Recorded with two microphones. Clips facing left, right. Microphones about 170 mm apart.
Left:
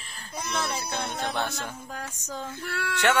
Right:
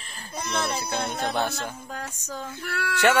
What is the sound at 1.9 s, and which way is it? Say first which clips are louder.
Speech: right 1 dB; 15° left (ahead or behind).